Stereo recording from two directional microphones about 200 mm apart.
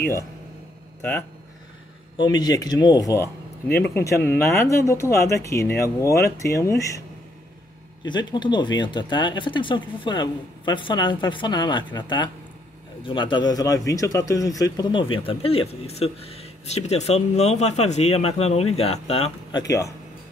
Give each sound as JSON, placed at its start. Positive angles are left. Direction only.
{"t": 2.1, "sound": "speech", "side_deg": 20}
{"t": 8.0, "sound": "speech", "side_deg": 20}
{"t": 19.6, "sound": "speech", "side_deg": 15}